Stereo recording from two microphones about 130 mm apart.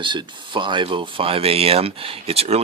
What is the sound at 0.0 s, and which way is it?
Speech, 35° right (ahead or behind).